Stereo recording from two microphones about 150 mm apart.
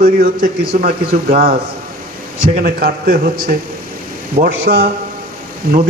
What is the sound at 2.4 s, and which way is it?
A man's voice, 90° right.